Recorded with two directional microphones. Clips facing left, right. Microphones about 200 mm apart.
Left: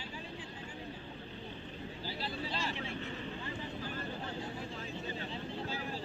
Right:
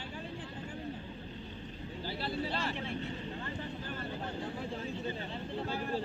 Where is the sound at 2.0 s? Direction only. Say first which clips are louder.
Right 5 dB; 55° right (ahead or behind).